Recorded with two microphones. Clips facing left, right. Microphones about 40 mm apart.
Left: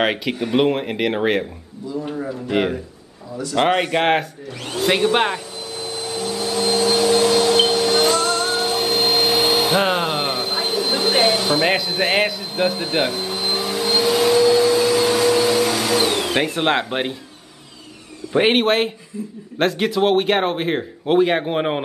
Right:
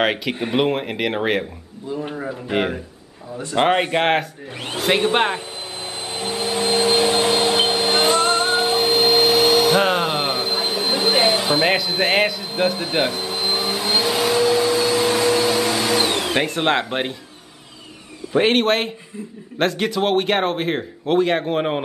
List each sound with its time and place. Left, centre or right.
0.0 s speech: centre
2.0 s speech: right
2.5 s speech: centre
4.6 s speech: right
5.8 s vacuum cleaner: right
9.0 s vacuum cleaner: centre
11.6 s speech: centre
13.7 s vacuum cleaner: centre
18.3 s speech: centre